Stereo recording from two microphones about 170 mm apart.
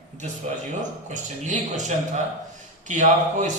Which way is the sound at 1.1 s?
45° right (ahead or behind).